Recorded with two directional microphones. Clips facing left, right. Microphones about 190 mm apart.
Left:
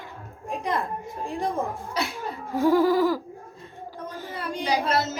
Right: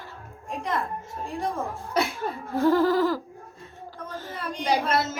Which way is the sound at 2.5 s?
10° left (ahead or behind).